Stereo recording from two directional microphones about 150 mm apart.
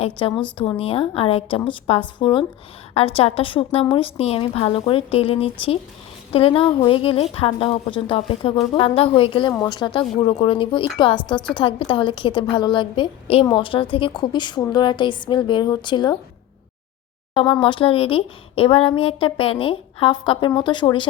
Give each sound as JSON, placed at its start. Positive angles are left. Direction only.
{"t": 0.0, "sound": "a woman's voice", "side_deg": 35}
{"t": 17.3, "sound": "speech", "side_deg": 35}